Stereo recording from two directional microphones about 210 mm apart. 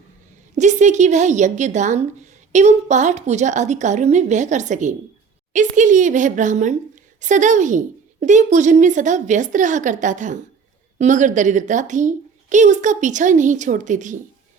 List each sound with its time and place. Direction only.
0.5 s a woman's voice: 35° right (ahead or behind)